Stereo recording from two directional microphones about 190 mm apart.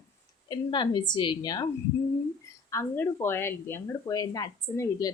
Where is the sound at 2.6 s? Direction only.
15° left (ahead or behind).